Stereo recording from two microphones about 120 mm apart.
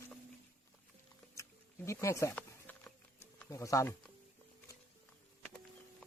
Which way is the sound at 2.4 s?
10° left (ahead or behind).